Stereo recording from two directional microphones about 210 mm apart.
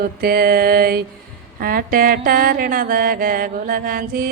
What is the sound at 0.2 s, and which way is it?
Mantra, 45° right (ahead or behind).